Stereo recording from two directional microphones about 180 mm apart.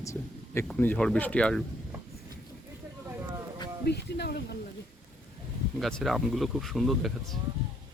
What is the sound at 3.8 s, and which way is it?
Speech, 65° left (ahead or behind).